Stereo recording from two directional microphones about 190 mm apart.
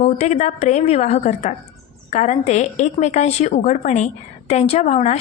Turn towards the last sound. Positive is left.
turn(degrees=35)  # may be behind; listen again after turning